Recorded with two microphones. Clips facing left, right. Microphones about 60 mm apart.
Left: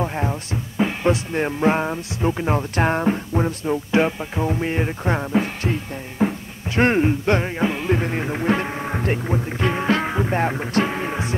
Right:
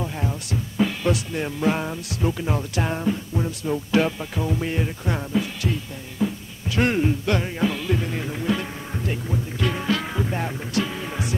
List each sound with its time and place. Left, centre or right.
0.0 s music: left
3.6 s music: left
9.6 s music: left